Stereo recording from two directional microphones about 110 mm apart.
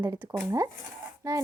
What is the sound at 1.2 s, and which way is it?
Speech, 35° right (ahead or behind).